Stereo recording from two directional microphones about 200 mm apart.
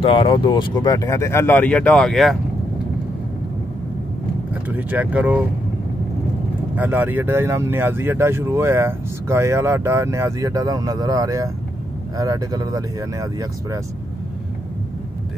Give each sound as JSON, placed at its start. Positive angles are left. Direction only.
{"t": 0.0, "sound": "speech", "side_deg": 25}
{"t": 4.6, "sound": "speech", "side_deg": -10}
{"t": 6.7, "sound": "speech", "side_deg": -10}